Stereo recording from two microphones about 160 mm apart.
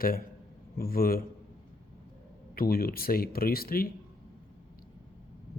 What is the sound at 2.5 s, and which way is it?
Speech, 70° left (ahead or behind).